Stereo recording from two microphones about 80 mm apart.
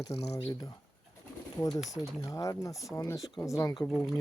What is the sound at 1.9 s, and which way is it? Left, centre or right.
Speech, left.